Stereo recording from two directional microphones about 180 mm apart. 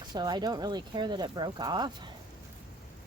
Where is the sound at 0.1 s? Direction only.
25° right (ahead or behind).